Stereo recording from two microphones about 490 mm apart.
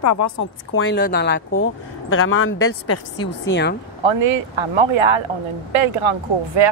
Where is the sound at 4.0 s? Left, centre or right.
Right.